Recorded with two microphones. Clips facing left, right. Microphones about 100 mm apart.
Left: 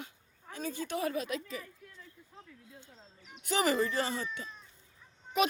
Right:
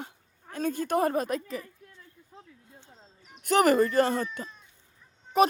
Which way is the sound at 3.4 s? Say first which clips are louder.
Right 8 dB; 55° right (ahead or behind).